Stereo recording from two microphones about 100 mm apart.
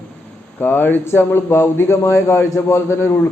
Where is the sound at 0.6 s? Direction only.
20° left (ahead or behind).